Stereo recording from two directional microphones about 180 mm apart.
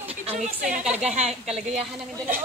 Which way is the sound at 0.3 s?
40° right (ahead or behind).